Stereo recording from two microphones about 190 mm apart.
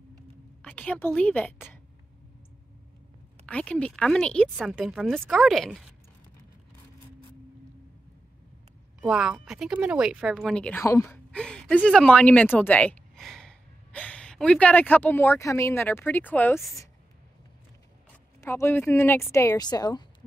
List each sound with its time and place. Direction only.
0.6 s a woman's voice: 5° left (ahead or behind)
3.4 s speech: 5° left (ahead or behind)
9.0 s speech: 5° right (ahead or behind); by 11.1 s 15° left (ahead or behind)
11.3 s a sound: 5° left (ahead or behind)
11.7 s speech: 5° left (ahead or behind)
18.4 s speech: 15° left (ahead or behind)